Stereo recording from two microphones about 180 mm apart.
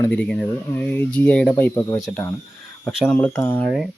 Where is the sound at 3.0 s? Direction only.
5° left (ahead or behind).